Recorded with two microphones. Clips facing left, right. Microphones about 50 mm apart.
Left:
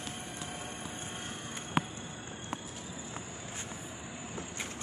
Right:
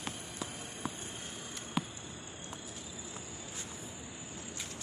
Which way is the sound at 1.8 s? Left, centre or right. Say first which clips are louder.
Left 4 dB; left.